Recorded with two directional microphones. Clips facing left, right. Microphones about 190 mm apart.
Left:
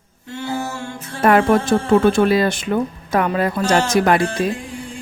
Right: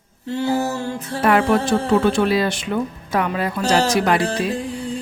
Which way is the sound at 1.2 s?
45° left (ahead or behind).